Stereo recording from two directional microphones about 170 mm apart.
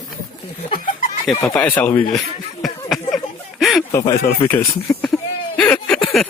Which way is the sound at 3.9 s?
20° left (ahead or behind).